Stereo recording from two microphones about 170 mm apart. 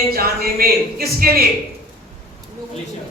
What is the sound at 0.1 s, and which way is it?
A man's voice, 60° right (ahead or behind).